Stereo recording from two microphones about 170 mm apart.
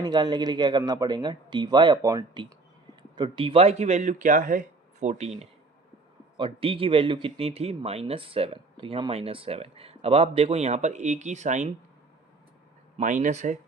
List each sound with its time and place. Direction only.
0.0 s speech: 25° right (ahead or behind); by 5.3 s 40° right (ahead or behind)
6.3 s speech: 30° right (ahead or behind)
13.0 s speech: 45° right (ahead or behind)